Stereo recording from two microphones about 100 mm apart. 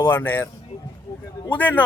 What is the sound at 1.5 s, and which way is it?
Speech, 15° left (ahead or behind).